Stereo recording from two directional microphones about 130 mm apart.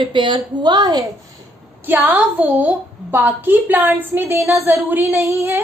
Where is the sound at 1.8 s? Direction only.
15° right (ahead or behind).